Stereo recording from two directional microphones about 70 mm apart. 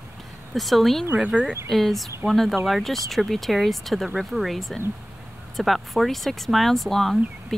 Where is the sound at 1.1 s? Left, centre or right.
Centre.